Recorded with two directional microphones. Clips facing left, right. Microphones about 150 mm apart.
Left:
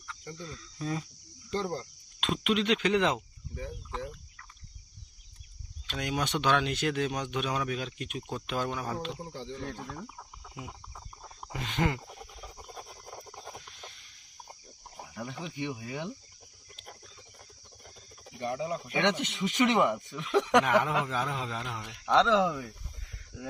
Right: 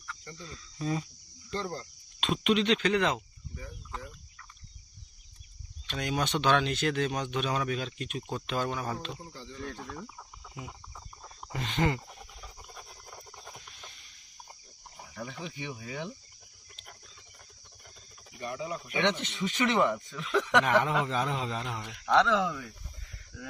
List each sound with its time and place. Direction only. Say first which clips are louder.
0.1 s cricket: left 3 dB; centre (ahead or behind)
1.5 s cricket: left 3 dB; 15° left (ahead or behind)
2.2 s speech: right 2 dB; centre (ahead or behind)
2.9 s speech: left 1 dB; 20° left (ahead or behind)
5.9 s speech: right 1 dB; 10° left (ahead or behind)
8.5 s speech: right 1 dB; centre (ahead or behind)
9.0 s speech: left 4 dB; 15° left (ahead or behind)
12.7 s a sound: left 4 dB; 25° left (ahead or behind)
15.1 s speech: left 1 dB; 5° left (ahead or behind)
18.3 s speech: left 3 dB; 30° left (ahead or behind)
18.9 s speech: even; 15° left (ahead or behind)
21.3 s a man's voice: right 2 dB; 5° right (ahead or behind)
21.9 s speech: left 1 dB; 25° left (ahead or behind)